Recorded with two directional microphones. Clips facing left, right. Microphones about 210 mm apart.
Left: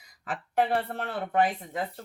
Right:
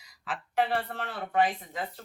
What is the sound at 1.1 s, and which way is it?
Speech, 55° left (ahead or behind).